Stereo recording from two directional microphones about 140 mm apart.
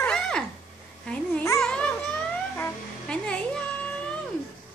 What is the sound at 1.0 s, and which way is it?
Babbling, 10° left (ahead or behind).